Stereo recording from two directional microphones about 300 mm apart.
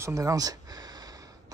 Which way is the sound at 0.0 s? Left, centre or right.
Centre.